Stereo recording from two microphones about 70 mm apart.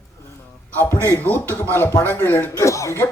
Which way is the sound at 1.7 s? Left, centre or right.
Left.